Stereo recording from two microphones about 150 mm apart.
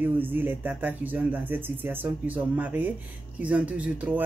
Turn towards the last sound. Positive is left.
turn(degrees=-10)  # may be behind; listen again after turning